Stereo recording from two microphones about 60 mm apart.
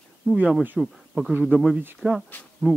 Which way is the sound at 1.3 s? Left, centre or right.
Right.